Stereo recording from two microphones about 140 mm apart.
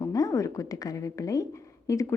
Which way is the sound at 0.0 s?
25° left (ahead or behind).